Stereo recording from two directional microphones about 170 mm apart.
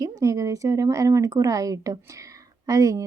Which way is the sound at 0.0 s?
20° right (ahead or behind).